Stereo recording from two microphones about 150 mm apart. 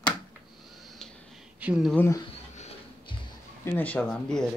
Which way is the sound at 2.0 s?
20° left (ahead or behind).